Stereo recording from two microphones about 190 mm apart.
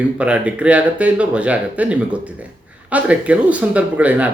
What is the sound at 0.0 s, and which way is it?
Speech, 5° right (ahead or behind).